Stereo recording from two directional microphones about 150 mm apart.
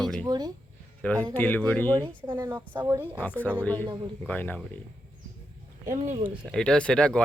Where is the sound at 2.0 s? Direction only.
30° right (ahead or behind).